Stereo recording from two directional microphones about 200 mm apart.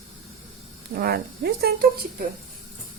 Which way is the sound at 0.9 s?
50° right (ahead or behind).